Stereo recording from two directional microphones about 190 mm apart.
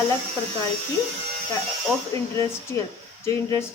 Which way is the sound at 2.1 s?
15° left (ahead or behind).